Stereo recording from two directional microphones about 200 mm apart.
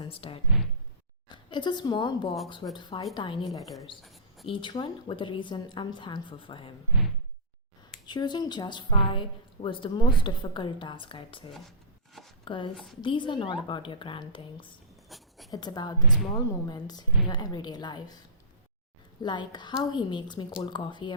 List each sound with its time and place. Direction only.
0.0 s a woman's voice: 25° left (ahead or behind)
3.6 s a woman's voice: centre (ahead or behind)
4.0 s a sound: centre (ahead or behind)
4.4 s a woman's voice: 25° left (ahead or behind)
8.0 s a woman's voice: 20° left (ahead or behind)
12.5 s a woman's voice: 25° left (ahead or behind)
12.7 s a woman's voice: centre (ahead or behind)
13.0 s a woman's voice: 25° left (ahead or behind)
15.1 s speech: centre (ahead or behind)
15.4 s a woman's voice: 20° left (ahead or behind)
19.2 s a woman's voice: 20° left (ahead or behind)